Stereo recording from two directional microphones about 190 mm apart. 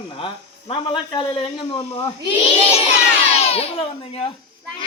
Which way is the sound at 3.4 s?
35° left (ahead or behind).